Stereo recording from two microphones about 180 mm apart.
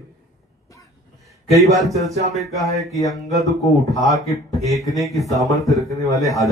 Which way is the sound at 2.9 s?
20° left (ahead or behind).